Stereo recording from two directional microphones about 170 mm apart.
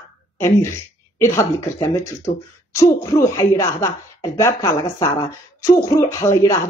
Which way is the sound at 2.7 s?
20° left (ahead or behind).